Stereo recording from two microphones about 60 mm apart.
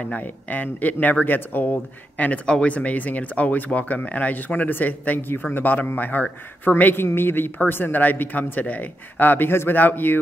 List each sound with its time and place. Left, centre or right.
0.0 s speech: left